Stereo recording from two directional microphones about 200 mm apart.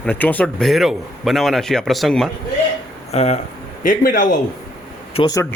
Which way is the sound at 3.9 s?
45° left (ahead or behind).